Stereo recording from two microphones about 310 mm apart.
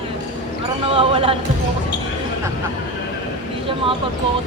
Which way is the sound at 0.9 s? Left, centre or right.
Centre.